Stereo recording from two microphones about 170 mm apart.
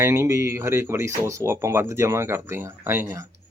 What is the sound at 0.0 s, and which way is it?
Speech, 15° right (ahead or behind).